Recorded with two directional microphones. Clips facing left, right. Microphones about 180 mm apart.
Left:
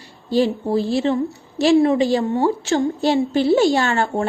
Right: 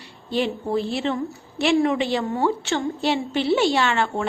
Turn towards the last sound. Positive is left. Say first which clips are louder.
# left 3 dB
turn(degrees=40)  # may be behind; listen again after turning